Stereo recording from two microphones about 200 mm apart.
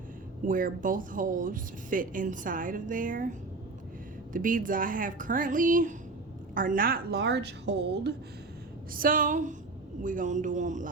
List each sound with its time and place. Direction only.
0.4 s a woman's voice: 45° right (ahead or behind); by 8.1 s 60° right (ahead or behind)
8.9 s speech: 45° right (ahead or behind)